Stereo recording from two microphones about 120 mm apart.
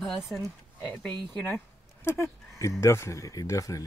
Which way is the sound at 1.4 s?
20° left (ahead or behind).